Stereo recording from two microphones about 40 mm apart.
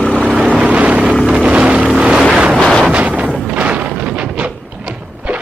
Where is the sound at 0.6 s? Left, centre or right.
Right.